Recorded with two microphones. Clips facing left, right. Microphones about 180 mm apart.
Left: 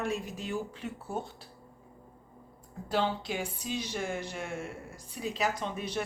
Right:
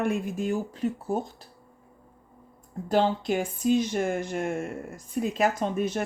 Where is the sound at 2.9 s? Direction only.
45° right (ahead or behind).